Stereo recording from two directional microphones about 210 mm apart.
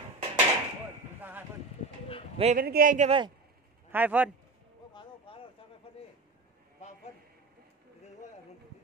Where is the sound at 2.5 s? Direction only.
45° right (ahead or behind); by 3.3 s 30° right (ahead or behind).